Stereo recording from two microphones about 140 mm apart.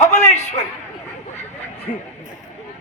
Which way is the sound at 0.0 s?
55° left (ahead or behind).